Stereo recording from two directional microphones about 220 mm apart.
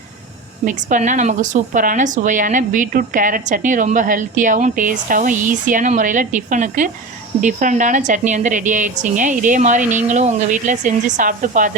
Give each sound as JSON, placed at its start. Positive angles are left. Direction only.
{"t": 0.6, "sound": "a woman's voice", "side_deg": -35}